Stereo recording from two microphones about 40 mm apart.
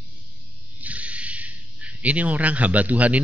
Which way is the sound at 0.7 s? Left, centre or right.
Right.